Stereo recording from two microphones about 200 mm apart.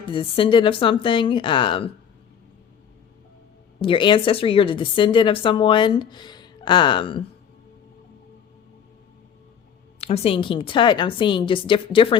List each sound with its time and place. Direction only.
0.1 s a woman's voice: 25° left (ahead or behind)
3.8 s a woman's voice: 25° left (ahead or behind)
10.0 s a woman's voice: 30° left (ahead or behind)